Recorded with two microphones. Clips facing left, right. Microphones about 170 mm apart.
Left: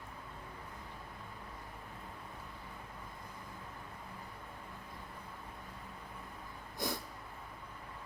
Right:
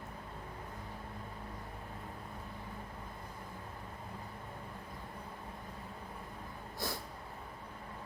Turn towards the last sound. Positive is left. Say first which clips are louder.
# left 2 dB
turn(degrees=20)  # may be behind; listen again after turning